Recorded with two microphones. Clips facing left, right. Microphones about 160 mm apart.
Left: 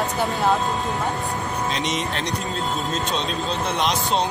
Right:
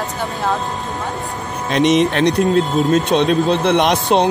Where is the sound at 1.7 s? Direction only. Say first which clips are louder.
Right 16 dB; 60° right (ahead or behind).